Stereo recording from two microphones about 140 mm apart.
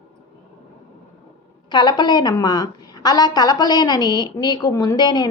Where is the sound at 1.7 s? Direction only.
30° left (ahead or behind).